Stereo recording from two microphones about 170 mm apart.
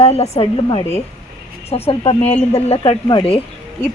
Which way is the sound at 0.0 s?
35° left (ahead or behind).